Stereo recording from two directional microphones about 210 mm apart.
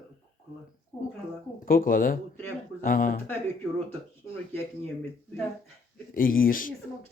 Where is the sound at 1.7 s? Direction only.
40° left (ahead or behind).